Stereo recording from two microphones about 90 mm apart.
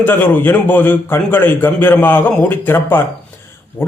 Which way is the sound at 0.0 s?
20° left (ahead or behind).